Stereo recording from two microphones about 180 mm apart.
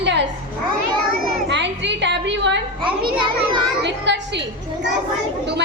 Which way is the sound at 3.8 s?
75° right (ahead or behind).